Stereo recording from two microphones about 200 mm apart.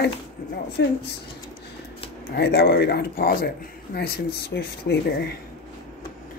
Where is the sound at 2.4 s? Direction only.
55° left (ahead or behind).